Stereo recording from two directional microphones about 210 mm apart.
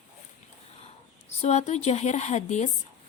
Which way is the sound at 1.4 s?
30° left (ahead or behind).